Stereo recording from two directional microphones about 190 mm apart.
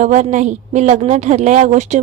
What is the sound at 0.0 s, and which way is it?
A woman's voice, 40° right (ahead or behind).